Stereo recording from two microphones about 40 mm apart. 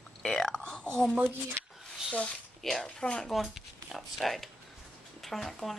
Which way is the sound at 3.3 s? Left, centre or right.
Centre.